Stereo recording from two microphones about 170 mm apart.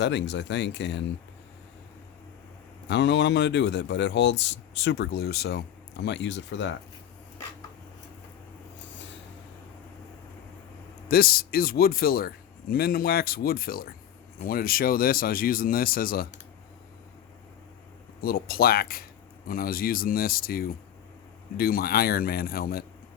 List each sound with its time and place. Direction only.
0.0 s speech: 90° left
2.9 s speech: 90° left; by 5.6 s 70° left (ahead or behind)
6.1 s speech: 90° left
11.1 s a man's voice: 60° left (ahead or behind)
18.2 s a man's voice: 60° left (ahead or behind)